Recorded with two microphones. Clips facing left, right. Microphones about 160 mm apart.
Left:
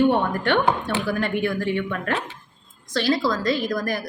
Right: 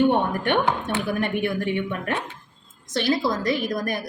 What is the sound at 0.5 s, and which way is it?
A woman's voice, 20° right (ahead or behind).